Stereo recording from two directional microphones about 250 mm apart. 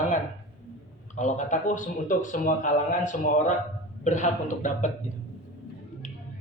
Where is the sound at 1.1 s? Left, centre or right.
Left.